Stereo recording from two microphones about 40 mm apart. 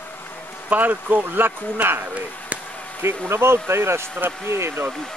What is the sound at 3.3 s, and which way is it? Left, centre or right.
Speech, right.